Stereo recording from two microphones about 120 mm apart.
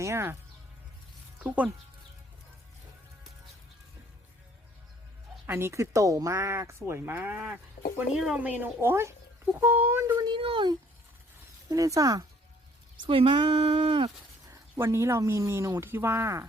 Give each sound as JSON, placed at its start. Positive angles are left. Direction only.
{"t": 0.0, "sound": "speech", "side_deg": -20}
{"t": 1.5, "sound": "a woman's voice", "side_deg": -10}
{"t": 5.5, "sound": "speech", "side_deg": -20}
{"t": 8.1, "sound": "speech", "side_deg": -5}
{"t": 8.4, "sound": "a woman's voice", "side_deg": -15}
{"t": 10.2, "sound": "speech", "side_deg": -45}
{"t": 11.7, "sound": "speech", "side_deg": -30}
{"t": 13.1, "sound": "speech", "side_deg": -45}
{"t": 14.4, "sound": "speech", "side_deg": -25}